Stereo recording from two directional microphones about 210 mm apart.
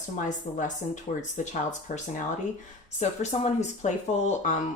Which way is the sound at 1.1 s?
30° left (ahead or behind).